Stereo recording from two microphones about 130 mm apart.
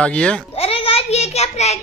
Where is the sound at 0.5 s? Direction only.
50° left (ahead or behind).